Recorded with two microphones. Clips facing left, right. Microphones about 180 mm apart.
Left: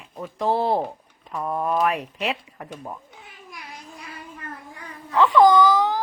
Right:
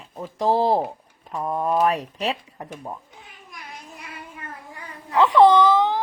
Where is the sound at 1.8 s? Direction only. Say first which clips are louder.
Right 2 dB; 35° right (ahead or behind).